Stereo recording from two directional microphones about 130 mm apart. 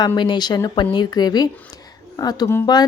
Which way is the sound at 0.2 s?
35° left (ahead or behind).